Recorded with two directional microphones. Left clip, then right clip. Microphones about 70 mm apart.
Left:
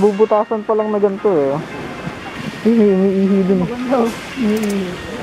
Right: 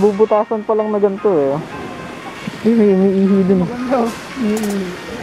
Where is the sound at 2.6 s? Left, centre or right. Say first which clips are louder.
Even; centre.